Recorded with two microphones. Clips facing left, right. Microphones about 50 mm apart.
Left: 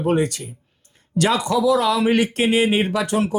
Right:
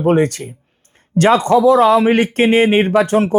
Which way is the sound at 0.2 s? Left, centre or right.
Right.